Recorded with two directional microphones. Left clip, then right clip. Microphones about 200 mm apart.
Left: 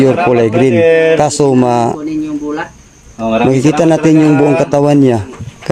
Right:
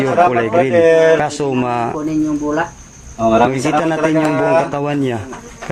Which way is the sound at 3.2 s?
Centre (ahead or behind).